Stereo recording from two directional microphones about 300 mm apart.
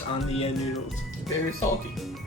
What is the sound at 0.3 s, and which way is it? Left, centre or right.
Speech, left.